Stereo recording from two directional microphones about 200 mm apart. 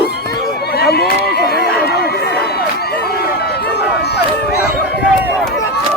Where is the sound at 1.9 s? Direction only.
55° left (ahead or behind).